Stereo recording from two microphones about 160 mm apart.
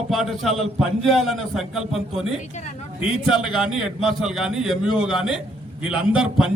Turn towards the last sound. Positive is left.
turn(degrees=-5)  # may be behind; listen again after turning